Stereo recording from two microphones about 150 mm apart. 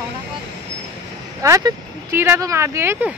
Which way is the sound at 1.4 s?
20° right (ahead or behind).